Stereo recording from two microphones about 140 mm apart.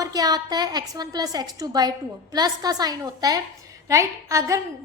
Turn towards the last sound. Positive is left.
turn(degrees=-20)  # may be behind; listen again after turning